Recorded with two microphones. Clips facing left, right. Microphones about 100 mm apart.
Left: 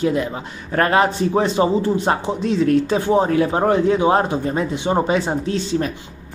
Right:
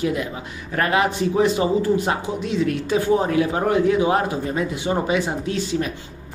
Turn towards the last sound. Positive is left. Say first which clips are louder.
# left 2 dB
turn(degrees=35)  # may be behind; listen again after turning